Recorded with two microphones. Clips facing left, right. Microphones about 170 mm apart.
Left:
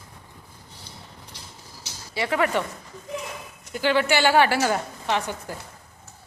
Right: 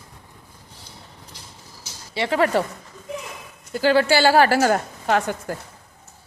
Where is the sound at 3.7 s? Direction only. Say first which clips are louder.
Right 4 dB; 35° right (ahead or behind).